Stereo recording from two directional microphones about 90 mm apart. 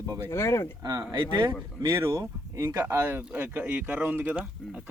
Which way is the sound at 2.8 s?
25° right (ahead or behind).